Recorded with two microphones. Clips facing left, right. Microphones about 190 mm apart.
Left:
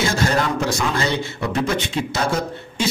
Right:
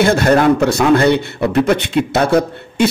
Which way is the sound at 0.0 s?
60° right (ahead or behind).